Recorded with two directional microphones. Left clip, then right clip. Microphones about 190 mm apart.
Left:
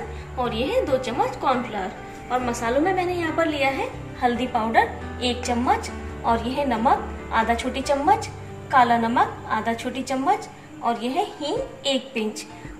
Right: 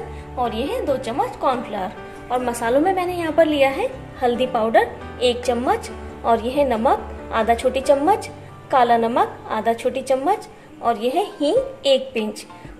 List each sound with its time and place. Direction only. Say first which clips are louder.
0.4 s a woman's voice: even; 50° right (ahead or behind)